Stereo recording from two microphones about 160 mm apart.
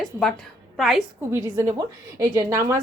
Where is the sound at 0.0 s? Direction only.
Centre (ahead or behind).